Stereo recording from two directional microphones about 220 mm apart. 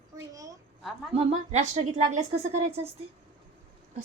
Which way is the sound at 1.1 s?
30° right (ahead or behind).